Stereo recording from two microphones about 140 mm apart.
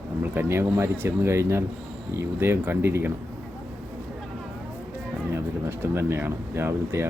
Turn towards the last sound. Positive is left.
turn(degrees=-15)  # may be behind; listen again after turning